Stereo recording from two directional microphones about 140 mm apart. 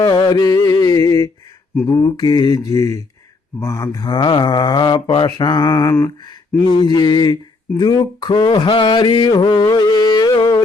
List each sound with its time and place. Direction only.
0.0 s a sound: 30° left (ahead or behind)
3.6 s speech: 20° left (ahead or behind)
7.8 s mantra: 30° left (ahead or behind)